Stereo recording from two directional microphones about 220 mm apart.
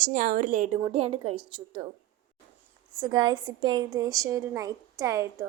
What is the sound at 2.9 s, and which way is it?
A woman's voice, 20° right (ahead or behind).